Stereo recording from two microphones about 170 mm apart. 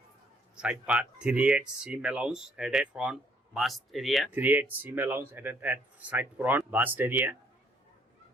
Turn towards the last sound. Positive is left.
turn(degrees=-10)  # may be behind; listen again after turning